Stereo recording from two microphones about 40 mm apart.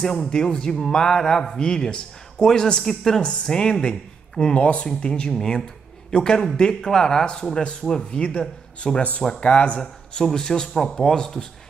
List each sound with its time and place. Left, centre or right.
0.0 s a man's voice: centre
0.3 s a man's voice: centre
4.6 s a man's voice: left; by 11.4 s centre